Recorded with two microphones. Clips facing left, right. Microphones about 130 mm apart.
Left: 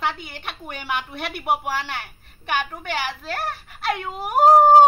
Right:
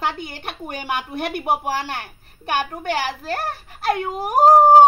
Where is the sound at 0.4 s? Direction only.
40° right (ahead or behind).